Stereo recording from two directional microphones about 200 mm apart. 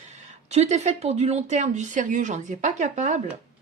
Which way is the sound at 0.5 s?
35° right (ahead or behind).